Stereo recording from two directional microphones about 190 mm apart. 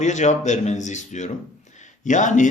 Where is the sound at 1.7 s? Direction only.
40° left (ahead or behind).